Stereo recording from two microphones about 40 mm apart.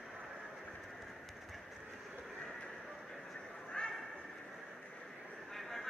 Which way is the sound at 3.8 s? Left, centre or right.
Left.